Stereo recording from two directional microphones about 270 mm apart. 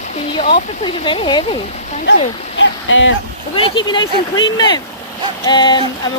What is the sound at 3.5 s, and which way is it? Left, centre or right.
Speech, centre.